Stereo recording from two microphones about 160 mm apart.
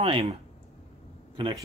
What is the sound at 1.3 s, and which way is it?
Speech, 30° right (ahead or behind).